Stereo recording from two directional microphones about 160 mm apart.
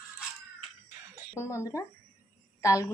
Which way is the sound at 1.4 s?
20° left (ahead or behind).